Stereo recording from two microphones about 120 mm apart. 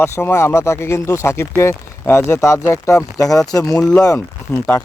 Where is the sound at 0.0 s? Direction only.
20° left (ahead or behind).